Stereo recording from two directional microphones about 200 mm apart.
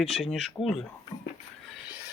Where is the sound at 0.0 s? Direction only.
Centre (ahead or behind).